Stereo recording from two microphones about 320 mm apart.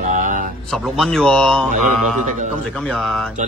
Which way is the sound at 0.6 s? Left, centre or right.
Centre.